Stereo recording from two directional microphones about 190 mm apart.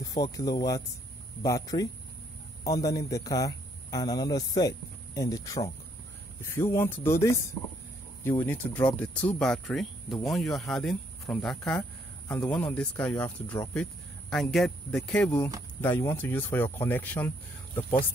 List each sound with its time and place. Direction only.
0.0 s a man's voice: 20° left (ahead or behind)
14.3 s speech: centre (ahead or behind)